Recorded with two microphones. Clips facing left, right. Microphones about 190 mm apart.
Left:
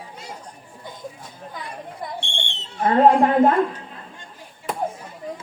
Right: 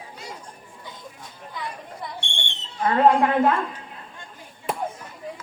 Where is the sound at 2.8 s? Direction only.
30° left (ahead or behind).